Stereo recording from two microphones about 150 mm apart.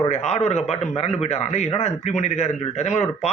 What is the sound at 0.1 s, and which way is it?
Speech, 45° left (ahead or behind).